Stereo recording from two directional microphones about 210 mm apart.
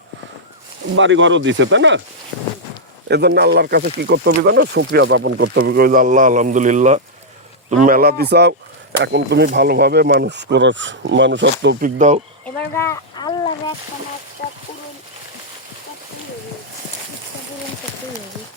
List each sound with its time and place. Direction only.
0.9 s speech: 60° right (ahead or behind)
3.1 s speech: 50° right (ahead or behind)
11.8 s speech: 35° right (ahead or behind)
12.5 s speech: 10° left (ahead or behind)